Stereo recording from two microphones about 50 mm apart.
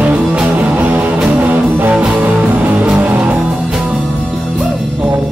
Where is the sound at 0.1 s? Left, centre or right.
Centre.